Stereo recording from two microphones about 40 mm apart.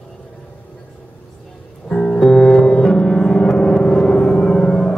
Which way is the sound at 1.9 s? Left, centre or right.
Left.